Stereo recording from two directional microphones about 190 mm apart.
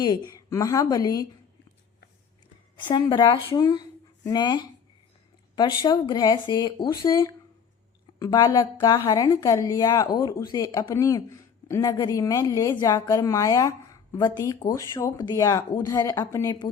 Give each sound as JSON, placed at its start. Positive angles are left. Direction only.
{"t": 0.0, "sound": "a woman's voice", "side_deg": 20}
{"t": 2.7, "sound": "a woman's voice", "side_deg": 25}